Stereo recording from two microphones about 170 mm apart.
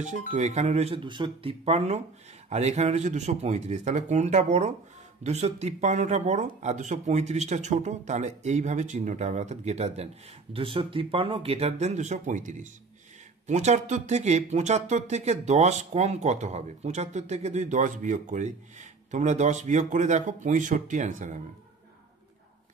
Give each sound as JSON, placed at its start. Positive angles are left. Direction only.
{"t": 0.3, "sound": "speech", "side_deg": -40}